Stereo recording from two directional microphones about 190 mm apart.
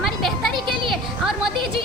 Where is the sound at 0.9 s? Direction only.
Centre (ahead or behind).